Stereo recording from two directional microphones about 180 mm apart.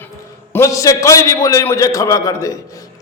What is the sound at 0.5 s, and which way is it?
A man's voice, 15° left (ahead or behind).